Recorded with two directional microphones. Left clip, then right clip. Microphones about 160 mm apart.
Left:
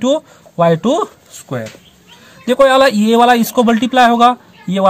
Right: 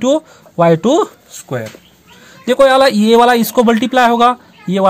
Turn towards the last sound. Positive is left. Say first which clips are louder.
# right 1 dB
turn(degrees=-25)  # may be behind; listen again after turning